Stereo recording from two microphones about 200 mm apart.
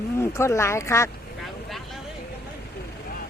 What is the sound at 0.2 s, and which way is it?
Speech, 15° left (ahead or behind).